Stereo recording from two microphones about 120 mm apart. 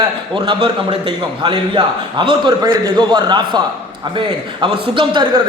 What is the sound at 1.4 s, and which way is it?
A man's voice, 40° right (ahead or behind).